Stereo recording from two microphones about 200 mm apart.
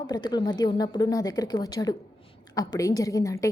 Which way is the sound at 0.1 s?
20° left (ahead or behind).